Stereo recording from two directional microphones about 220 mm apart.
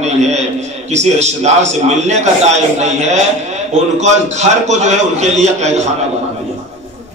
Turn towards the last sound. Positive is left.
turn(degrees=-30)  # may be behind; listen again after turning